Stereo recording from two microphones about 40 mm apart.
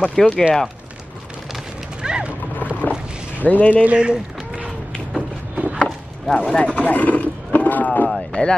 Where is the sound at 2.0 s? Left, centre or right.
Right.